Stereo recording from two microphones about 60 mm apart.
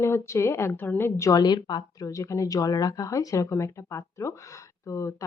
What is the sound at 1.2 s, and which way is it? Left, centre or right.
Speech, left.